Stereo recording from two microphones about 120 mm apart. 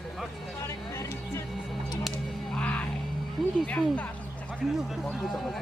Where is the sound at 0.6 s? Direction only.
20° left (ahead or behind).